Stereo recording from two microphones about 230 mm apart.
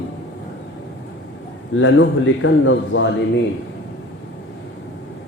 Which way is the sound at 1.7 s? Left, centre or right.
Left.